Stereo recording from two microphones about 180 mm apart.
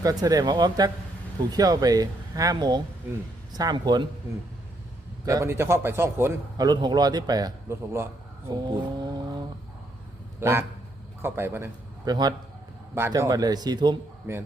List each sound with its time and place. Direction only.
0.0 s a man's voice: 20° right (ahead or behind)
5.2 s a man's voice: 15° right (ahead or behind)
10.4 s a man's voice: 15° right (ahead or behind)